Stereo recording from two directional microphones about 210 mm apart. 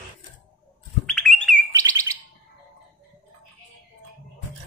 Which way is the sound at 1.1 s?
5° left (ahead or behind).